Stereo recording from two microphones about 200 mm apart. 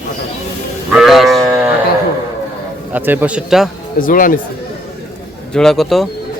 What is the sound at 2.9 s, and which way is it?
Speech, 10° right (ahead or behind).